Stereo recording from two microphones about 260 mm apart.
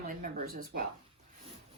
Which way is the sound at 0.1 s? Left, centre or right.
Right.